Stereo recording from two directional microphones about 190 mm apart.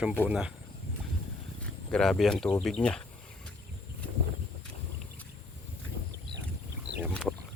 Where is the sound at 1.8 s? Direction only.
5° left (ahead or behind).